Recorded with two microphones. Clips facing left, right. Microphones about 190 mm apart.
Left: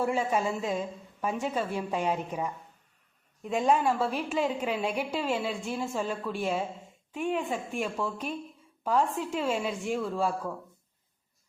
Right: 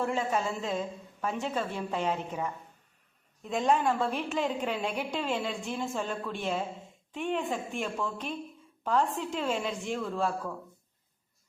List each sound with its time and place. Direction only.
0.0 s a woman's voice: 10° left (ahead or behind)